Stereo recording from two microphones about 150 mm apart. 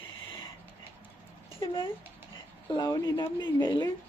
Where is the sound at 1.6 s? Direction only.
35° left (ahead or behind).